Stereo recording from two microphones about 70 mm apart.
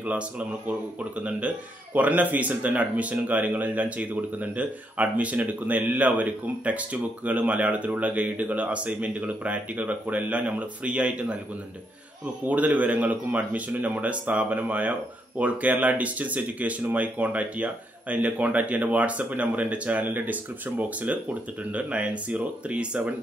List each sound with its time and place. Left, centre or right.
2.0 s speech: right
12.4 s speech: right